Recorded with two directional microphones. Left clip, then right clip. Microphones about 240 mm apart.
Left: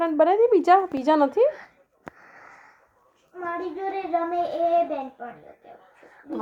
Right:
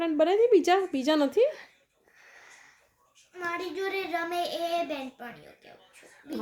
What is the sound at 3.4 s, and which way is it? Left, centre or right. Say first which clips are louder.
Speech: left 3 dB; right.